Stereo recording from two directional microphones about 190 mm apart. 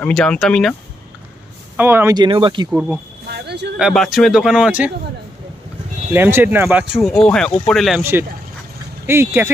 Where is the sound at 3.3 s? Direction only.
60° right (ahead or behind).